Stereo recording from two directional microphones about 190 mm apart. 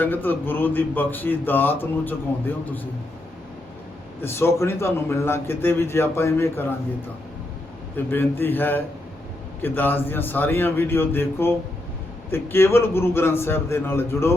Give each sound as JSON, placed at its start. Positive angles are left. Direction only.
{"t": 0.0, "sound": "speech", "side_deg": 10}
{"t": 4.2, "sound": "speech", "side_deg": 10}
{"t": 8.1, "sound": "speech", "side_deg": 10}